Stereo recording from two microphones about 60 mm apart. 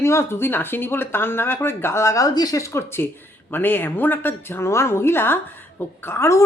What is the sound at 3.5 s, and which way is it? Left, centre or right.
Speech, left.